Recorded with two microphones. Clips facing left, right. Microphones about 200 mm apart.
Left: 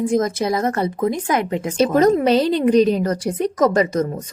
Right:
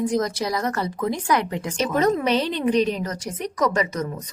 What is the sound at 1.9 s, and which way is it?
A woman's voice, 40° left (ahead or behind).